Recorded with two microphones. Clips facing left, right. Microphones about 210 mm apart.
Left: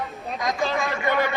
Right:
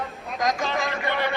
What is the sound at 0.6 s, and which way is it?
Speech, 45° left (ahead or behind).